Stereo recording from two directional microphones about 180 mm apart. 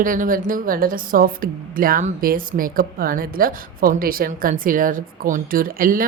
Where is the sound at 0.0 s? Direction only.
50° right (ahead or behind).